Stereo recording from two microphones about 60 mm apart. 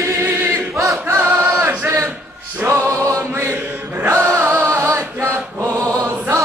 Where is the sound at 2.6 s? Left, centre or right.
Right.